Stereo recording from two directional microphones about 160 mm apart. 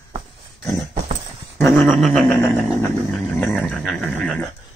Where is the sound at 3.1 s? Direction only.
5° left (ahead or behind).